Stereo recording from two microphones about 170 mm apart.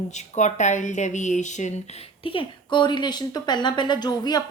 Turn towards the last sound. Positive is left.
turn(degrees=25)  # may be behind; listen again after turning